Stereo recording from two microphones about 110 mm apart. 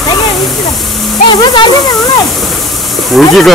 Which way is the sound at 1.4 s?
45° left (ahead or behind).